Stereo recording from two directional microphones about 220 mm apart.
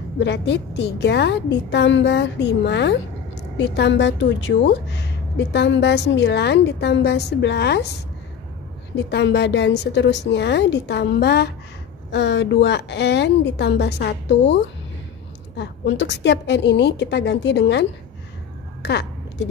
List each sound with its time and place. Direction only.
0.2 s a woman's voice: 50° left (ahead or behind)
8.9 s a woman's voice: 50° left (ahead or behind)
18.9 s a sound: 50° left (ahead or behind)